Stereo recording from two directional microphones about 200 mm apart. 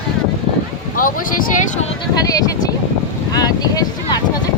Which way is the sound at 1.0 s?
45° left (ahead or behind).